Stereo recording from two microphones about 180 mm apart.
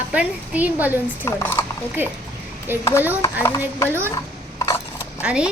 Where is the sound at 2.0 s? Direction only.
10° right (ahead or behind).